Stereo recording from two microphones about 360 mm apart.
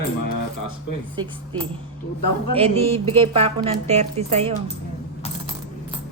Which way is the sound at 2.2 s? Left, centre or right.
Left.